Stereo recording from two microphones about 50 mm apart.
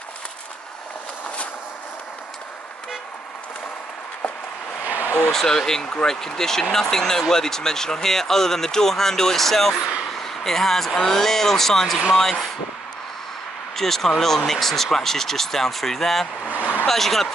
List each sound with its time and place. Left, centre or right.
4.8 s a sound: right
5.3 s speech: centre
13.7 s speech: centre